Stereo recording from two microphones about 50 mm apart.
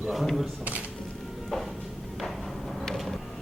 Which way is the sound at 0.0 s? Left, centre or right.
Centre.